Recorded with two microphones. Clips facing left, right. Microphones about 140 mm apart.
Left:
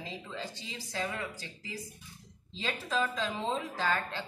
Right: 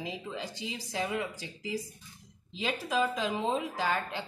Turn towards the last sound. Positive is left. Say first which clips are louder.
# right 1 dB
turn(degrees=-15)  # may be behind; listen again after turning